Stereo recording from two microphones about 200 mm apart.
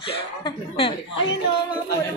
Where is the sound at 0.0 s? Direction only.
25° left (ahead or behind).